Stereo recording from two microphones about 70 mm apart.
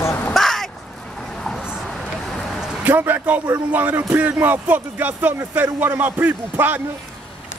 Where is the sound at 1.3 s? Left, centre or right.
Centre.